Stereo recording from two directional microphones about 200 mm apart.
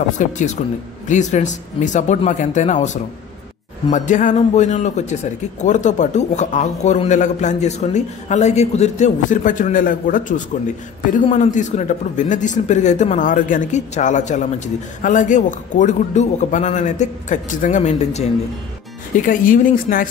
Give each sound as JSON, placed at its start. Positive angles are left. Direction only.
{"t": 0.2, "sound": "speech", "side_deg": 40}